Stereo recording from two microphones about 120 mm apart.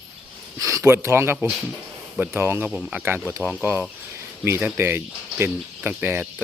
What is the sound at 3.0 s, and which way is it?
Speech, 15° right (ahead or behind).